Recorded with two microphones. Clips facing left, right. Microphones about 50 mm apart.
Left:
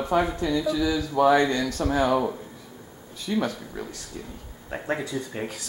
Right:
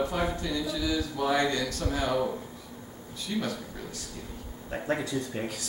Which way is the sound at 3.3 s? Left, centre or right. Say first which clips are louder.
Left 6 dB; left.